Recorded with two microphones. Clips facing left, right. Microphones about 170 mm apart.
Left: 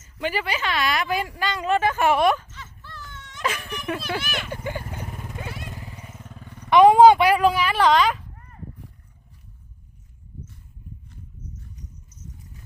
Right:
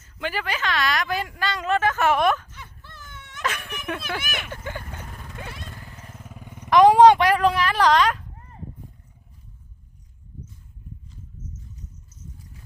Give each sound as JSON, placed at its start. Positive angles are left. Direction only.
{"t": 0.0, "sound": "speech", "side_deg": 10}
{"t": 2.5, "sound": "dog", "side_deg": -15}
{"t": 3.4, "sound": "speech", "side_deg": 10}
{"t": 4.4, "sound": "vehicle", "side_deg": 15}
{"t": 6.2, "sound": "vehicle", "side_deg": -10}
{"t": 6.7, "sound": "speech", "side_deg": 5}
{"t": 8.4, "sound": "a sound", "side_deg": -25}
{"t": 11.1, "sound": "horse", "side_deg": 65}